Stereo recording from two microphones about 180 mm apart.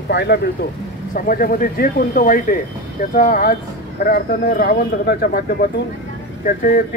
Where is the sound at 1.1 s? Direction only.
50° left (ahead or behind).